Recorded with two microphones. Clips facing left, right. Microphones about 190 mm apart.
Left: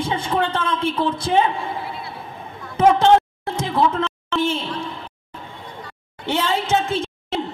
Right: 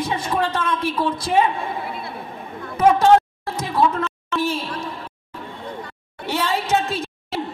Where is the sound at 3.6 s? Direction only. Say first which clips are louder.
Even; 25° left (ahead or behind).